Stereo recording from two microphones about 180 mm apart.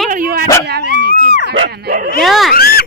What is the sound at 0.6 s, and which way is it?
Speech, 65° right (ahead or behind).